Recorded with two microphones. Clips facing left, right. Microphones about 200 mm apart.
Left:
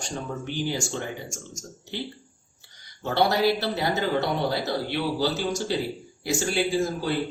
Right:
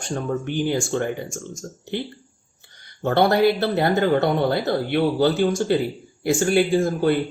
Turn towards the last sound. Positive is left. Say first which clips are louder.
# right 6 dB
turn(degrees=-55)  # may be behind; listen again after turning